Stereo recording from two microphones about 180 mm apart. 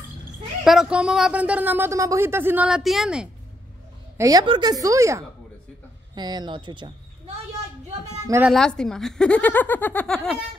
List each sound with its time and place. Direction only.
0.7 s speech: 5° right (ahead or behind)
4.2 s a woman's voice: 20° right (ahead or behind)
8.3 s speech: 10° right (ahead or behind)
8.5 s speech: 5° left (ahead or behind)